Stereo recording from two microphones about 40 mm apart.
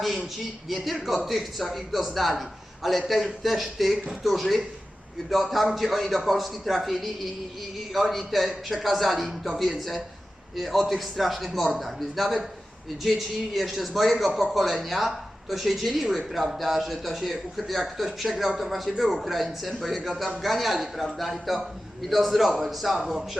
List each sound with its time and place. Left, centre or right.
0.7 s speech: centre